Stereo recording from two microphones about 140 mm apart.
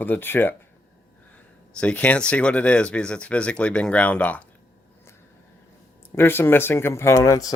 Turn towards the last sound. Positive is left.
turn(degrees=25)  # may be behind; listen again after turning